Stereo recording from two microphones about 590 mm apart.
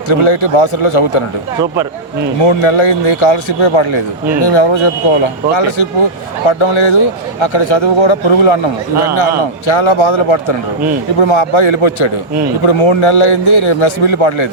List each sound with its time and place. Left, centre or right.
0.1 s a man's voice: left
2.4 s a man's voice: left
9.6 s a man's voice: left